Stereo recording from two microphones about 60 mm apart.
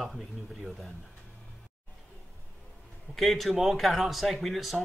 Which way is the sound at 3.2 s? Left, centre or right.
Centre.